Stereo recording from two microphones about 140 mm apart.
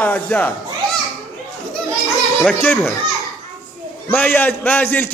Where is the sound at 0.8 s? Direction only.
Centre (ahead or behind).